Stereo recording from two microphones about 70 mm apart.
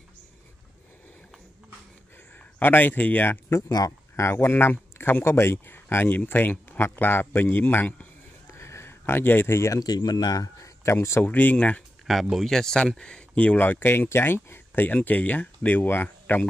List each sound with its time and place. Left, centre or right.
2.6 s speech: left
3.3 s speech: left
3.6 s speech: left
4.2 s speech: left
8.5 s a sound: left
9.7 s speech: left
11.2 s speech: left
12.1 s speech: centre
13.6 s speech: left